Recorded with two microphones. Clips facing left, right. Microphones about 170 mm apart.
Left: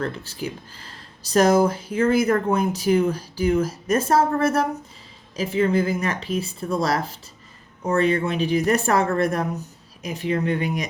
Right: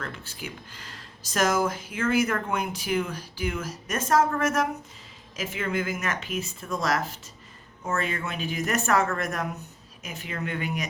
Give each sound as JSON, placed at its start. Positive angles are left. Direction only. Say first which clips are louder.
{"t": 0.0, "sound": "speech", "louder": "left 9 dB", "side_deg": 35}